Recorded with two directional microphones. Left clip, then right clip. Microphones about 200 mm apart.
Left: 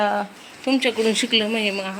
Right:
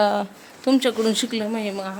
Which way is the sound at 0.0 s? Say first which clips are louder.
Right 1 dB; 30° right (ahead or behind).